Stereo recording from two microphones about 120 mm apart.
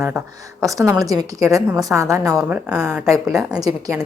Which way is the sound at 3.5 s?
30° right (ahead or behind).